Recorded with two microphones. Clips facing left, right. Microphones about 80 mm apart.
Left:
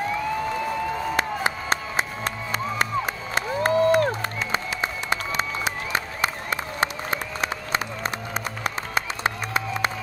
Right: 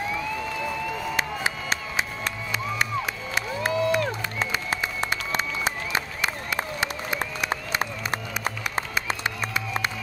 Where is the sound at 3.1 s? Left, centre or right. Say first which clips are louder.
Left 3 dB; left.